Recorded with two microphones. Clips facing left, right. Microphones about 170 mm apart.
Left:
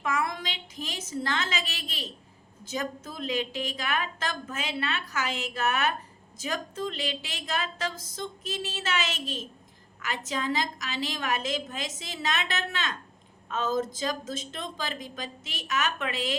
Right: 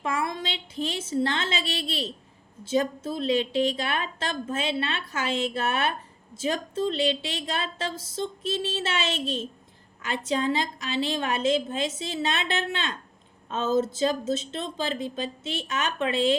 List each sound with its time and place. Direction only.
0.0 s a woman's voice: 30° right (ahead or behind)